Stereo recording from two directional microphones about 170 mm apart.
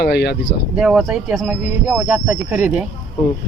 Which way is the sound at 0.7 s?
5° right (ahead or behind).